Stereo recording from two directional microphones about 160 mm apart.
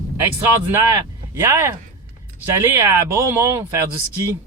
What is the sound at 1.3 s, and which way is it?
Speech, 15° right (ahead or behind).